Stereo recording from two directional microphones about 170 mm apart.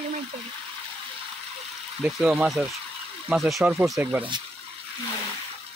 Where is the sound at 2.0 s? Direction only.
10° right (ahead or behind).